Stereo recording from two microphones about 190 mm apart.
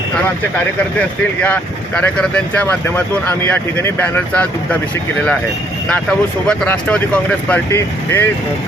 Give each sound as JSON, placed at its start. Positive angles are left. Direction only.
{"t": 0.9, "sound": "speech", "side_deg": 5}
{"t": 5.9, "sound": "speech", "side_deg": 5}